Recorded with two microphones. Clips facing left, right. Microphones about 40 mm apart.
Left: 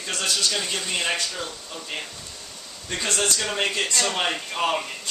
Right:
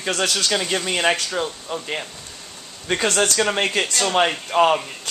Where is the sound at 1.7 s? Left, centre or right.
Right.